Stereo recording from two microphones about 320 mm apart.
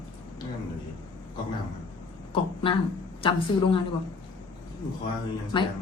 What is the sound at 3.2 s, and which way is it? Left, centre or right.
Speech, centre.